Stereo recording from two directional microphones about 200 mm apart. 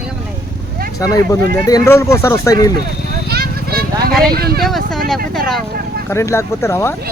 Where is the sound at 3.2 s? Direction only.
50° right (ahead or behind).